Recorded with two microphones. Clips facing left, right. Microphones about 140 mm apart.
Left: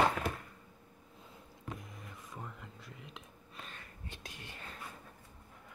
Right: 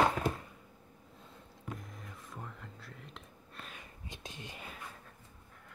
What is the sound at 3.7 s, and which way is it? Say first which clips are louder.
Whispering: right 1 dB; 15° right (ahead or behind).